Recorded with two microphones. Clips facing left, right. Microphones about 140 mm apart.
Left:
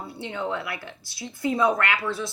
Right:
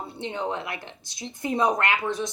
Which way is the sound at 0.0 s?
20° right (ahead or behind).